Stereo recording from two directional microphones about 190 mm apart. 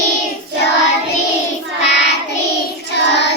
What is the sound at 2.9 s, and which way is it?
Child singing, 65° left (ahead or behind).